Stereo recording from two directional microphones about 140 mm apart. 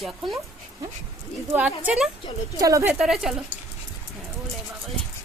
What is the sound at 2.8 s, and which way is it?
Speech, 5° right (ahead or behind).